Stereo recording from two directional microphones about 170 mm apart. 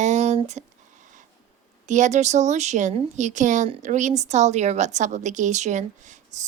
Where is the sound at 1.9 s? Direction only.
45° right (ahead or behind).